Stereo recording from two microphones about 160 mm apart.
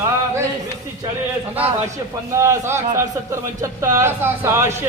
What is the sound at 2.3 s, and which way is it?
A man's voice, 20° right (ahead or behind).